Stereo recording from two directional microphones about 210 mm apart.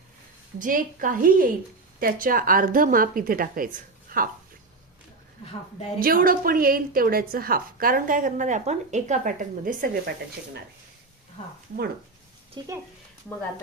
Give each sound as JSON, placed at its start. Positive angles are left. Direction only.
{"t": 0.6, "sound": "a woman's voice", "side_deg": -40}
{"t": 6.0, "sound": "a woman's voice", "side_deg": -45}
{"t": 12.6, "sound": "speech", "side_deg": -20}